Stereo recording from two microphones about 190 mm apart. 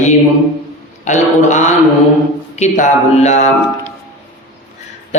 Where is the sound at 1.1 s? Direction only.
40° left (ahead or behind).